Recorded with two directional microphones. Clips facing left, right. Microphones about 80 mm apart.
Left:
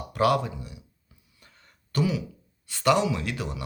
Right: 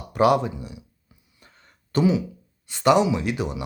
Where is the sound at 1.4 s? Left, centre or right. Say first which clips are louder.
Right 3 dB; right.